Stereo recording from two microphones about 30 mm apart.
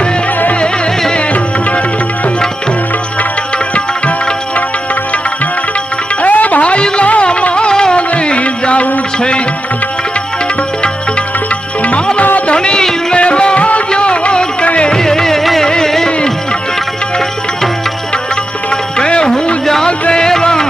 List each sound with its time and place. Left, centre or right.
3.8 s music: left
6.2 s music: left
6.6 s music: left
7.5 s music: left
7.9 s music: left
9.1 s music: left
11.8 s music: left
12.5 s music: left
14.9 s music: centre
18.7 s music: left